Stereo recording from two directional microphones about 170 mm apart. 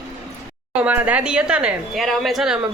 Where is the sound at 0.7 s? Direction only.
10° right (ahead or behind).